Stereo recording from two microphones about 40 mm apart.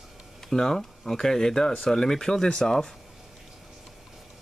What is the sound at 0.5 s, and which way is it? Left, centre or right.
Speech, centre.